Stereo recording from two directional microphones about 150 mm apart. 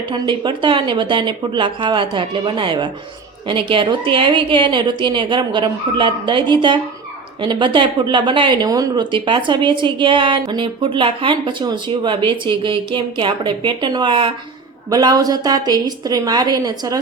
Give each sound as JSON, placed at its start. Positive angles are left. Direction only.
{"t": 0.1, "sound": "a woman's voice", "side_deg": -30}